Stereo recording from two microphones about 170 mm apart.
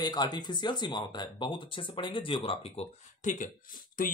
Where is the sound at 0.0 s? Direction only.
25° left (ahead or behind).